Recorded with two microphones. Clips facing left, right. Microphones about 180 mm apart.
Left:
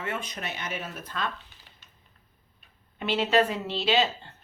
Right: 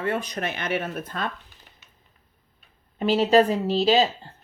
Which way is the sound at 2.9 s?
40° right (ahead or behind).